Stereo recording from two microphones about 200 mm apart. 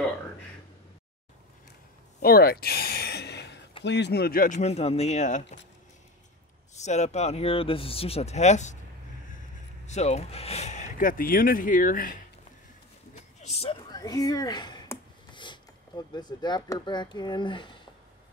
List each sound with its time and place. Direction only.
2.2 s a sound: 50° left (ahead or behind)
3.8 s speech: 60° left (ahead or behind); by 5.6 s 35° left (ahead or behind)
6.7 s speech: 35° left (ahead or behind)
9.8 s speech: 35° left (ahead or behind)
13.1 s a sound: 30° left (ahead or behind)
16.1 s speech: 20° left (ahead or behind)